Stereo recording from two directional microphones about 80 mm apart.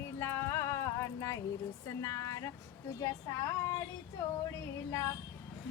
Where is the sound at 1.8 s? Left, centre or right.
Left.